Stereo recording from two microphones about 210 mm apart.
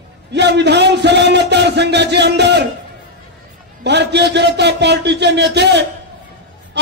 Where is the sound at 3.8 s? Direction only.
55° right (ahead or behind).